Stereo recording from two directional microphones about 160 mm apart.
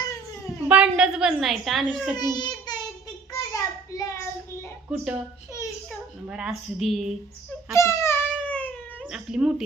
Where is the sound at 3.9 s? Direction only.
20° left (ahead or behind).